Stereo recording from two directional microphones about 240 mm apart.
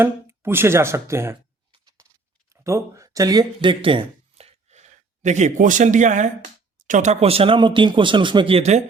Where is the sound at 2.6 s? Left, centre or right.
Centre.